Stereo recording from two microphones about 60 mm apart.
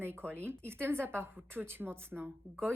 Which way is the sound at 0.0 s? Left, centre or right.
Right.